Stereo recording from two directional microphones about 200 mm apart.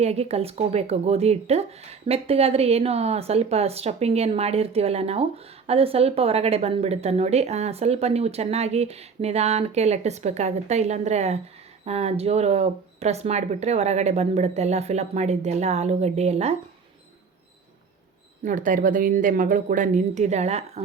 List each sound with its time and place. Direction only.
0.0 s speech: 30° right (ahead or behind)
18.4 s speech: 40° right (ahead or behind)